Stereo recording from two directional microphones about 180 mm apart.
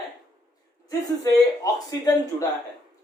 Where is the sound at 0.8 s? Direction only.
20° left (ahead or behind).